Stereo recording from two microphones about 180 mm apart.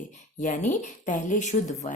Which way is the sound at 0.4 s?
45° left (ahead or behind).